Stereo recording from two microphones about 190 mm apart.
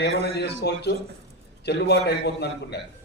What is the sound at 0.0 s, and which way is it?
A man's voice, 60° left (ahead or behind).